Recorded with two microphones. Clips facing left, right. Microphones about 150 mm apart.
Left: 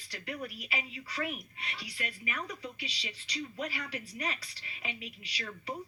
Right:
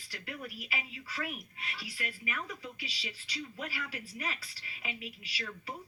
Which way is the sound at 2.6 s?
5° right (ahead or behind).